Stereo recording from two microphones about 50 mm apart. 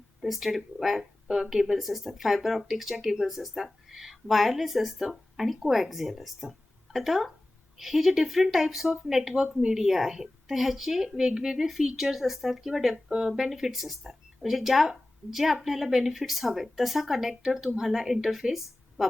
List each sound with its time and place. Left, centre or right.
0.2 s speech: centre